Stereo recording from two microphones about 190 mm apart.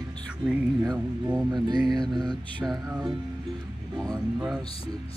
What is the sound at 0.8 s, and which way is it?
Speech, 20° right (ahead or behind).